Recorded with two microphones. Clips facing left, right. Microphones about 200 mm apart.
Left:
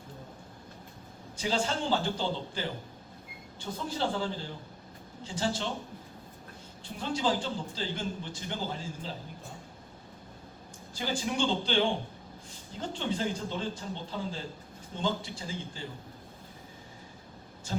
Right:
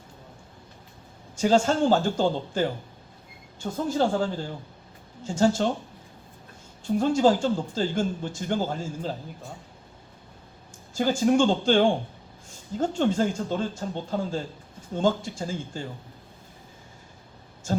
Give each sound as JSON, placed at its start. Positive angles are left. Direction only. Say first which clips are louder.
{"t": 1.4, "sound": "a man's voice", "louder": "right 10 dB", "side_deg": -45}
{"t": 6.8, "sound": "a man's voice", "louder": "right 10 dB", "side_deg": -45}
{"t": 10.9, "sound": "a man's voice", "louder": "right 11 dB", "side_deg": -45}
{"t": 17.7, "sound": "speech", "louder": "right 7 dB", "side_deg": -45}